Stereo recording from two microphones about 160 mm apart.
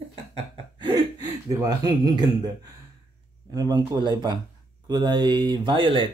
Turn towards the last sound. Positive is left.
turn(degrees=-30)  # may be behind; listen again after turning